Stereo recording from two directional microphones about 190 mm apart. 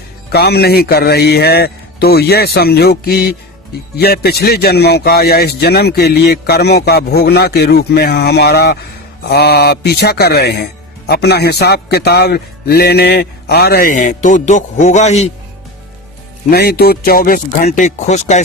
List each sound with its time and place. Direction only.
0.3 s speech: 60° left (ahead or behind); by 15.3 s 35° left (ahead or behind)
16.5 s speech: 55° left (ahead or behind); by 18.4 s 40° left (ahead or behind)